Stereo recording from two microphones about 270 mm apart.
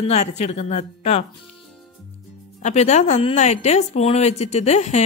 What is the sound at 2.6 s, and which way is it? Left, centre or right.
A woman's voice, left.